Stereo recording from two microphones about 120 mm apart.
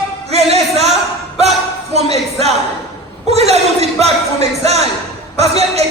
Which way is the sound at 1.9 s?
60° right (ahead or behind).